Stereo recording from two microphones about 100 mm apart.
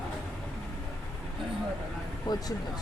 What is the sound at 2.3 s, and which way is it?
Speech, 45° left (ahead or behind).